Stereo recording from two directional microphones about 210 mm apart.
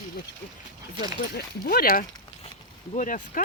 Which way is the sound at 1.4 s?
45° left (ahead or behind).